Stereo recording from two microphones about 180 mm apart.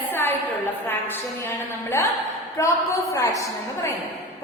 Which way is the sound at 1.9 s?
15° left (ahead or behind).